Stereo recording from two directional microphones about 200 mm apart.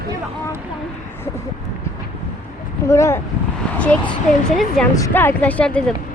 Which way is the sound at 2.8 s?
15° left (ahead or behind).